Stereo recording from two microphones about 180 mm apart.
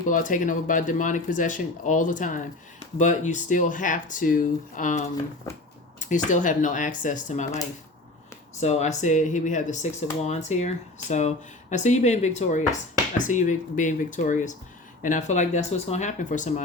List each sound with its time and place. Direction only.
0.1 s speech: 45° left (ahead or behind)
8.6 s speech: 40° left (ahead or behind)